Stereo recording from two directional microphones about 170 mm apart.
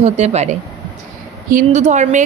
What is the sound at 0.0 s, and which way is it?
Speech, 40° right (ahead or behind).